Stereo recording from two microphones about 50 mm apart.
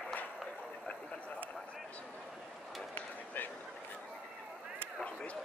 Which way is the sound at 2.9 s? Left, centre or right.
Left.